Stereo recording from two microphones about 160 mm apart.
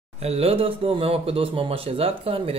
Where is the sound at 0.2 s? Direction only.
40° right (ahead or behind).